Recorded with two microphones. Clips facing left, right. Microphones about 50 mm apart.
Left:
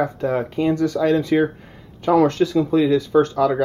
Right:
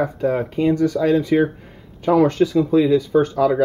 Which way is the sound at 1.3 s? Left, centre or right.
Centre.